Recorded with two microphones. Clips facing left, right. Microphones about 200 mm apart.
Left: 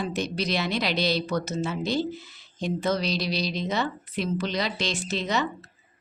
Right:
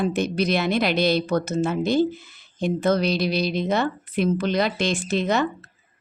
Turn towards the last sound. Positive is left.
turn(degrees=-55)  # may be behind; listen again after turning